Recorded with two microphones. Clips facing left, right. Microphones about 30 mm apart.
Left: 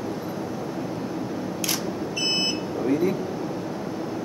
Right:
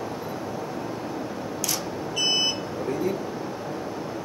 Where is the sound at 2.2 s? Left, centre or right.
Centre.